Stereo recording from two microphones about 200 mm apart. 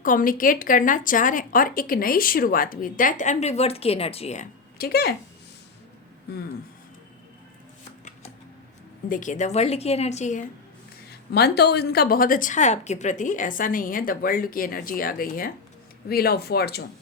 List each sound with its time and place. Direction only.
0.0 s a woman's voice: 45° left (ahead or behind)
4.8 s a woman's voice: 50° left (ahead or behind)
9.0 s a woman's voice: 40° left (ahead or behind)
11.3 s a woman's voice: 55° left (ahead or behind)